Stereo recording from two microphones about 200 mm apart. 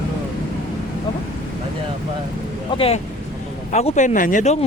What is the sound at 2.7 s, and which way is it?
Speech, 30° left (ahead or behind).